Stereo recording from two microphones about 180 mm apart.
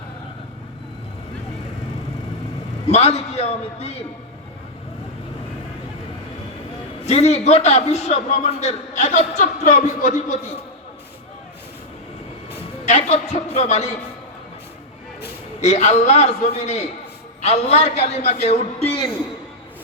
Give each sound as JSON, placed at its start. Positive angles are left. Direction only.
{"t": 2.8, "sound": "a man's voice", "side_deg": 35}
{"t": 7.0, "sound": "a man's voice", "side_deg": 35}
{"t": 12.8, "sound": "a man's voice", "side_deg": 40}
{"t": 15.6, "sound": "a man's voice", "side_deg": 40}